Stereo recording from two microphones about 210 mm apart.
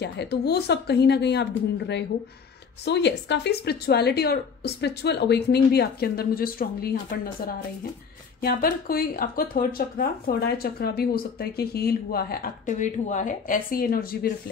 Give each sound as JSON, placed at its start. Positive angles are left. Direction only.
{"t": 0.0, "sound": "speech", "side_deg": 50}